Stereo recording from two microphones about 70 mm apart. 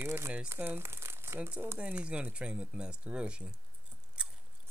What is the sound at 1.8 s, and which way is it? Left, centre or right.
Speech, centre.